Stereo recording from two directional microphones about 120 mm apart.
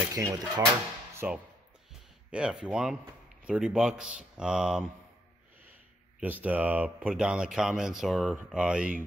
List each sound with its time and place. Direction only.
0.1 s speech: 35° right (ahead or behind)
1.2 s speech: 10° right (ahead or behind)
6.1 s speech: 15° right (ahead or behind)